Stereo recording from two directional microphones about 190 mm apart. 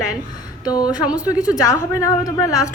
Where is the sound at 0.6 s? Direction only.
20° left (ahead or behind).